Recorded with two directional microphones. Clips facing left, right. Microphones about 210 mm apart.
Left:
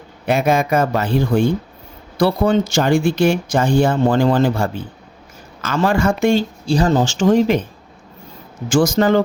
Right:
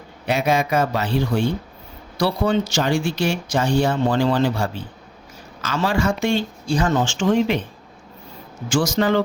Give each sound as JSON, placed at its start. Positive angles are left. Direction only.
{"t": 0.3, "sound": "speech", "side_deg": 50}
{"t": 6.7, "sound": "speech", "side_deg": 35}
{"t": 8.7, "sound": "speech", "side_deg": 50}